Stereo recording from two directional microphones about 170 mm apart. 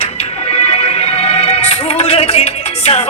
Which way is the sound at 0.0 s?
35° left (ahead or behind).